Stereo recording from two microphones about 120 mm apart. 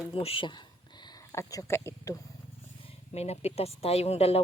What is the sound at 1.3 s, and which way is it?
Speech, 25° left (ahead or behind).